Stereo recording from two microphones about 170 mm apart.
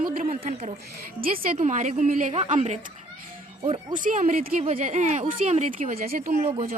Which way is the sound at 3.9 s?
50° right (ahead or behind).